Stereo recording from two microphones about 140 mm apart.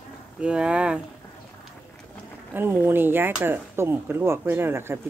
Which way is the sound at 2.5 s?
15° right (ahead or behind).